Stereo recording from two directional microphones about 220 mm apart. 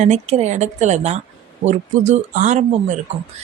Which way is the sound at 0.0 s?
30° right (ahead or behind).